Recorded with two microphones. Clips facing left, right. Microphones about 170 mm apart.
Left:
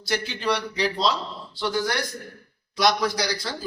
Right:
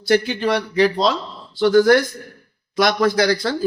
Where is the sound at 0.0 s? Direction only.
50° right (ahead or behind).